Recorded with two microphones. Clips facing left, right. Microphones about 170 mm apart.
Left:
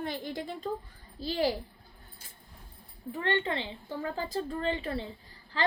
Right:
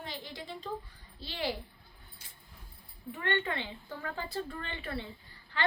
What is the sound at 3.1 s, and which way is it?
A woman's voice, 30° left (ahead or behind).